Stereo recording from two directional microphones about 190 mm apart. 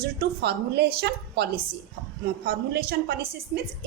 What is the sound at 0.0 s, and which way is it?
A woman's voice, 55° right (ahead or behind).